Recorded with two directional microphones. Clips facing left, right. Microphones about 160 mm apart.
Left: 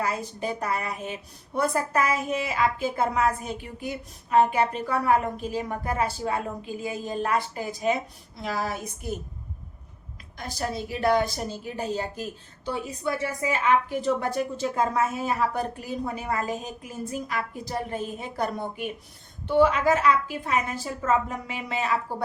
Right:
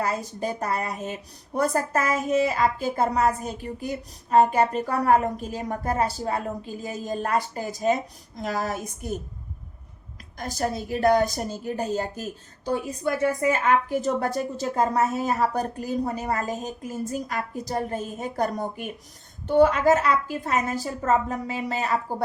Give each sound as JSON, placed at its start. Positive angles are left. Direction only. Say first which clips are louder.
{"t": 0.0, "sound": "a woman's voice", "louder": "right 2 dB", "side_deg": -40}
{"t": 10.3, "sound": "a woman's voice", "louder": "right 3 dB", "side_deg": -45}